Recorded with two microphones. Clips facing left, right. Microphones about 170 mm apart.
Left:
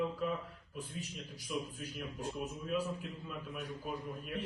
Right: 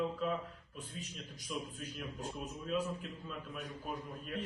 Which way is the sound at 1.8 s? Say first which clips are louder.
Left 1 dB; 10° left (ahead or behind).